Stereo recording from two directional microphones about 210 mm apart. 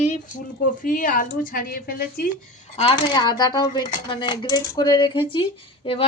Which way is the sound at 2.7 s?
25° left (ahead or behind).